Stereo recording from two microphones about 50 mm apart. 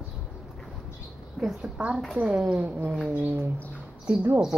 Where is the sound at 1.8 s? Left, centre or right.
Right.